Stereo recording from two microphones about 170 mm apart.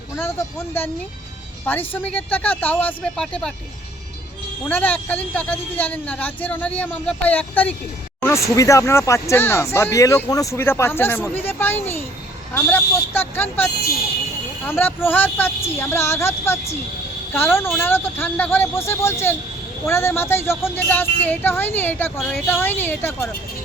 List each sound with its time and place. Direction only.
0.2 s speech: 15° left (ahead or behind)
4.7 s speech: 10° left (ahead or behind)